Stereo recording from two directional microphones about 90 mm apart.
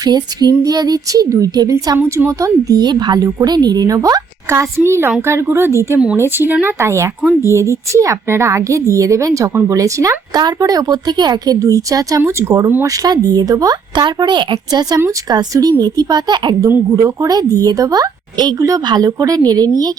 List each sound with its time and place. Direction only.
0.0 s speech: 50° right (ahead or behind)
2.0 s speech: 30° right (ahead or behind)
4.8 s a woman's voice: 25° right (ahead or behind); by 11.5 s 50° right (ahead or behind)
11.6 s a woman's voice: 40° right (ahead or behind)
12.8 s speech: 45° right (ahead or behind)
16.6 s speech: 30° right (ahead or behind); by 19.9 s 45° right (ahead or behind)